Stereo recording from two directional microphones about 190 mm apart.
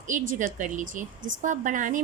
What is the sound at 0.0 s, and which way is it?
A woman's voice, 45° right (ahead or behind).